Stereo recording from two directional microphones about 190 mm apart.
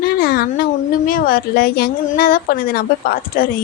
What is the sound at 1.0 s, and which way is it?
A woman's voice, 50° left (ahead or behind).